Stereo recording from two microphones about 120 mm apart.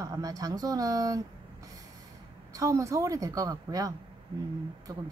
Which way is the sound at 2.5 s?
25° right (ahead or behind).